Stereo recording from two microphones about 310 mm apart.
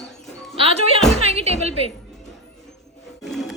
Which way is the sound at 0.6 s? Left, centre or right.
Centre.